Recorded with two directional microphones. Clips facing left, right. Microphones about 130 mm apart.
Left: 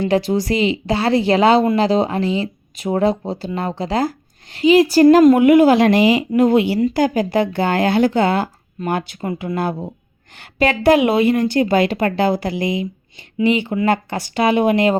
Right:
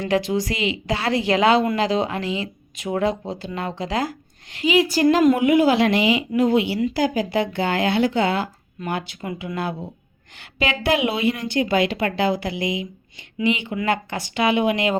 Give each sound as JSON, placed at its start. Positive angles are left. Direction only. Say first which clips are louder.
{"t": 0.0, "sound": "a woman's voice", "louder": "left 4 dB", "side_deg": 35}
{"t": 5.1, "sound": "a woman's voice", "louder": "left 5 dB", "side_deg": 50}